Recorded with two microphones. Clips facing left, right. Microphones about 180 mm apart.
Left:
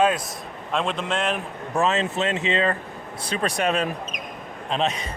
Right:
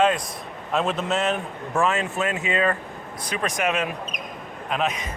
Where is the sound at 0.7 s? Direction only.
5° right (ahead or behind).